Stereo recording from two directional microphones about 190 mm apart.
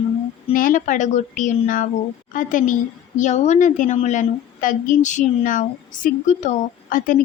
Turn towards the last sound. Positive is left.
turn(degrees=45)  # may be behind; listen again after turning